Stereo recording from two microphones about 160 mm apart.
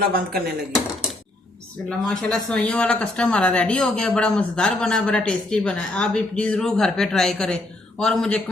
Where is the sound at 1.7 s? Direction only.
5° left (ahead or behind).